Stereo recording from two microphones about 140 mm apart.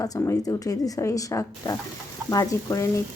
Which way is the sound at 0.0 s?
25° left (ahead or behind).